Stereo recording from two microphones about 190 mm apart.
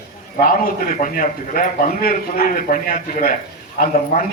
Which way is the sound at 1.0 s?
45° left (ahead or behind).